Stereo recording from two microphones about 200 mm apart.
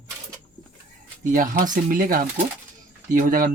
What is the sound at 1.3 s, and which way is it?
Speech, 45° right (ahead or behind).